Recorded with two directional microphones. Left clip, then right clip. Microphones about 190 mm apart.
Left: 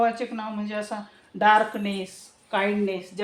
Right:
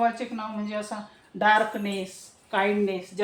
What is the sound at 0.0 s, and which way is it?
Speech, 30° left (ahead or behind).